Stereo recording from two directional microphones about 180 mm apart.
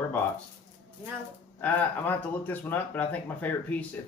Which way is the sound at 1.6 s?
10° left (ahead or behind).